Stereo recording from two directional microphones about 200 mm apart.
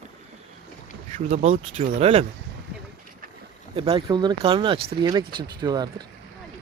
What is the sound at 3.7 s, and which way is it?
Speech, 25° right (ahead or behind).